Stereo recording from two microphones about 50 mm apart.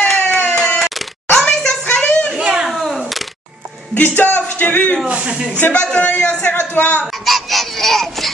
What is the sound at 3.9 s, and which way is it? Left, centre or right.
Speech, left.